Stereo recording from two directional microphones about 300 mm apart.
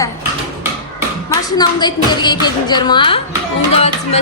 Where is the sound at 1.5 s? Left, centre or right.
Centre.